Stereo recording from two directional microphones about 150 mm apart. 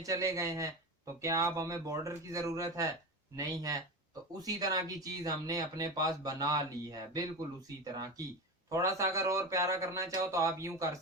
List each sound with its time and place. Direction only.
0.0 s speech: 20° right (ahead or behind)